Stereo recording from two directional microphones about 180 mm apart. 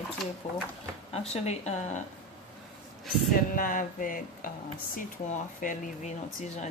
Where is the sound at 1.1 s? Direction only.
35° left (ahead or behind).